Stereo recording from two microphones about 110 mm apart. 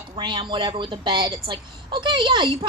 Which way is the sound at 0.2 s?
45° right (ahead or behind).